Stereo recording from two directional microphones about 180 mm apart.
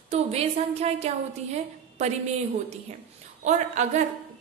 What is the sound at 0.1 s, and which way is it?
A woman's voice, 35° right (ahead or behind).